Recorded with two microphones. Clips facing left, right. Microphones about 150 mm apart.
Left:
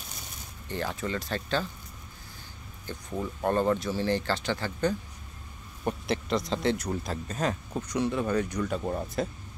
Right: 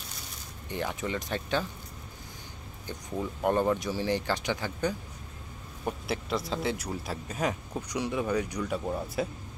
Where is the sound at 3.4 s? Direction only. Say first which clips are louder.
Even; 15° right (ahead or behind).